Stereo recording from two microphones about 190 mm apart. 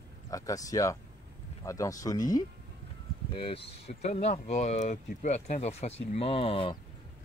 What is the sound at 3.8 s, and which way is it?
Speech, 35° left (ahead or behind).